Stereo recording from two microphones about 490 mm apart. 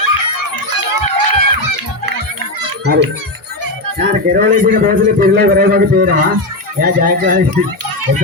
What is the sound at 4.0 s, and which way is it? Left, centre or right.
A man's voice, centre.